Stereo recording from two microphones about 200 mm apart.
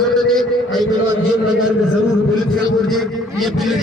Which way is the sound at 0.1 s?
Centre (ahead or behind).